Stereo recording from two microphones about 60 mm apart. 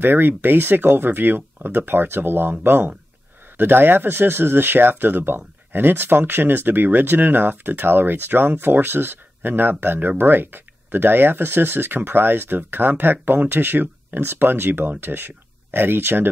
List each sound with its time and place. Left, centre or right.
0.0 s speech: right